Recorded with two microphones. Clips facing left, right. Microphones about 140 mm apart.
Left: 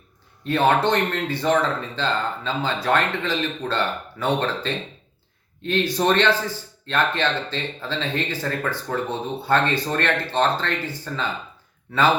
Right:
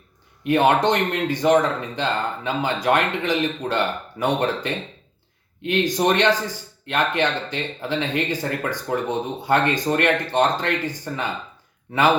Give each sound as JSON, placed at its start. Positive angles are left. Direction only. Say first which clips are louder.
{"t": 0.4, "sound": "speech", "louder": "right 2 dB", "side_deg": -15}